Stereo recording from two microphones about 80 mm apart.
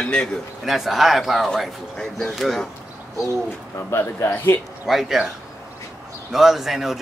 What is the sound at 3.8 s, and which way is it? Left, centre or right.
Speech, left.